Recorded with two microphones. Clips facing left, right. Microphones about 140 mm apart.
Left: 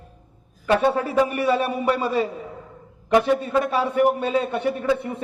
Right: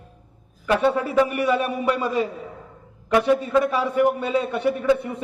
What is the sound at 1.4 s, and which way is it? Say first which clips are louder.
Speech: even; 30° left (ahead or behind).